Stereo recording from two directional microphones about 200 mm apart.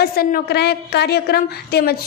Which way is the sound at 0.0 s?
50° left (ahead or behind).